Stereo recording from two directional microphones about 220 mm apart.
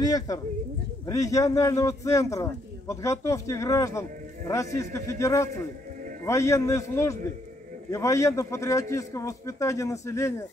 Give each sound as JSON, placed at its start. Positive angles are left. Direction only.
{"t": 0.0, "sound": "a man's voice", "side_deg": 15}